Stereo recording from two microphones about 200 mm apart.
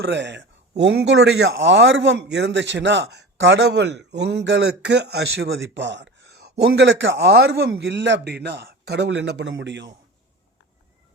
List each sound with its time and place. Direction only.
0.0 s a man's voice: 60° right (ahead or behind)